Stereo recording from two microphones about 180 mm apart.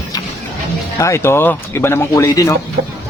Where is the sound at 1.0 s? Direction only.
15° left (ahead or behind).